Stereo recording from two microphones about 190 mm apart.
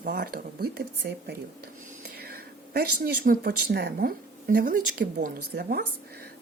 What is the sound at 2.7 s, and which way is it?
A woman's voice, 50° right (ahead or behind).